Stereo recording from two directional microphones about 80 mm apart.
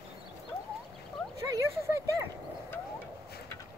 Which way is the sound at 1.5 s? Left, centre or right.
Right.